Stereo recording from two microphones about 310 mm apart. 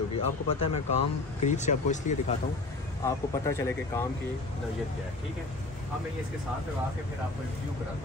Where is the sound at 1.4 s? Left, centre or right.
Left.